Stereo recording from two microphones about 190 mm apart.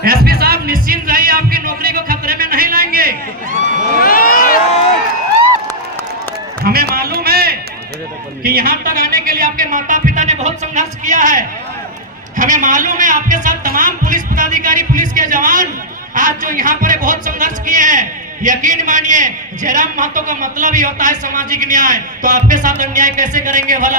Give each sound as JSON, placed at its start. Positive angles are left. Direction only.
{"t": 0.0, "sound": "music", "side_deg": -50}
{"t": 4.0, "sound": "a sound", "side_deg": 50}
{"t": 6.7, "sound": "run", "side_deg": -50}
{"t": 8.4, "sound": "a man's voice", "side_deg": -50}